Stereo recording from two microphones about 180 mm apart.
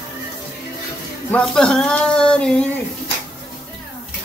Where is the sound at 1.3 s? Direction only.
5° left (ahead or behind).